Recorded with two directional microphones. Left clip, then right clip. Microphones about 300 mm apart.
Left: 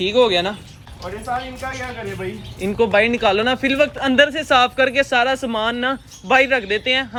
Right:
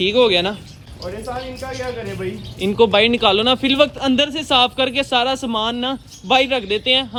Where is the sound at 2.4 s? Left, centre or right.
Centre.